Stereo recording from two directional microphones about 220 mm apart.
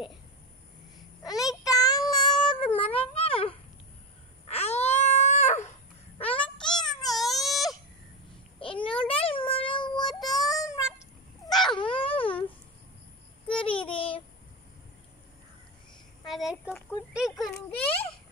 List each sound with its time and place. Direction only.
1.6 s child singing: 15° left (ahead or behind)
2.9 s cat: 25° left (ahead or behind)
4.5 s baby cry: 30° left (ahead or behind)
6.3 s a sound: 20° left (ahead or behind)
7.1 s baby cry: centre (ahead or behind)
8.5 s a sound: 25° left (ahead or behind)
9.0 s child singing: 25° left (ahead or behind)
10.5 s cat: 15° left (ahead or behind)
11.7 s wail: 25° left (ahead or behind)
13.5 s child singing: 25° left (ahead or behind)
16.3 s a sound: centre (ahead or behind)